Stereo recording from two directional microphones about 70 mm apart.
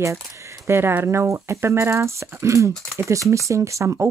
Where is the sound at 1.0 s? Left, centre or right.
Right.